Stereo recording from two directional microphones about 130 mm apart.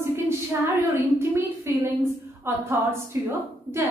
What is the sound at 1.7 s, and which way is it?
A woman's voice, 20° right (ahead or behind).